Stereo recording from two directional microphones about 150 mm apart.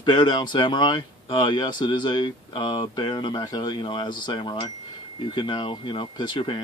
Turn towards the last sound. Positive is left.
turn(degrees=35)  # may be behind; listen again after turning